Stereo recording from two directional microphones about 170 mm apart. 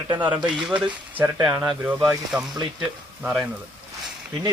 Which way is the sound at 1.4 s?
15° right (ahead or behind).